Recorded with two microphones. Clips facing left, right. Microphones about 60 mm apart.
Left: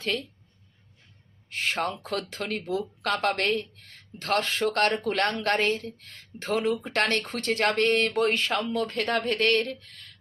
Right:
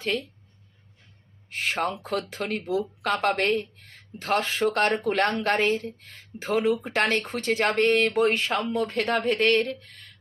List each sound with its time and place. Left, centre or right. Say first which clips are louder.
0.0 s speech: right 2 dB; centre
1.5 s speech: right 1 dB; centre
8.9 s speech: right 2 dB; centre